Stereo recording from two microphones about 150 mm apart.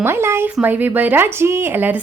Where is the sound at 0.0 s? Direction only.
15° right (ahead or behind).